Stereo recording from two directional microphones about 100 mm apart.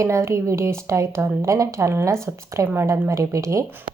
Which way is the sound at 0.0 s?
30° right (ahead or behind).